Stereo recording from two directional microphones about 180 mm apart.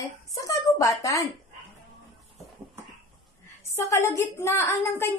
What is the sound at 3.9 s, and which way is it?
Speech, 15° left (ahead or behind).